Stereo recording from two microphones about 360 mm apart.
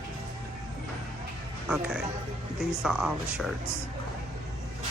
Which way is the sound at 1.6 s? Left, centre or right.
Centre.